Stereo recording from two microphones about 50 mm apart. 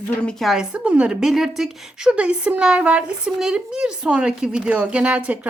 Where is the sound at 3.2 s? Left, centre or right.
Centre.